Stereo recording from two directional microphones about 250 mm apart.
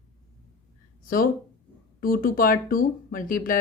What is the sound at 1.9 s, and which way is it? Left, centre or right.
Speech, left.